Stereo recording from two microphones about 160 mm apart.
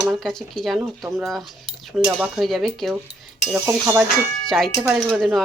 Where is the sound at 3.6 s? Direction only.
15° right (ahead or behind).